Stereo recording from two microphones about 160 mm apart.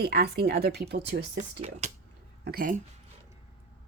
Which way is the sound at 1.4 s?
45° right (ahead or behind).